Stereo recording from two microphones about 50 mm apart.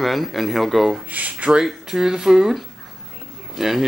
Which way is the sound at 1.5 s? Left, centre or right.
Centre.